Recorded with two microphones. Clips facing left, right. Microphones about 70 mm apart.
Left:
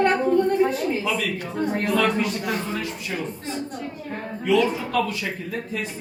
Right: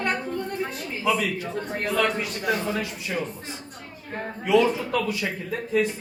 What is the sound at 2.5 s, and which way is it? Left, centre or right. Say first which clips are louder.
Speech: right 1 dB; centre.